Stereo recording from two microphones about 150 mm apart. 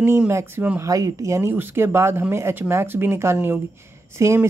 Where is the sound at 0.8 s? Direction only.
20° right (ahead or behind).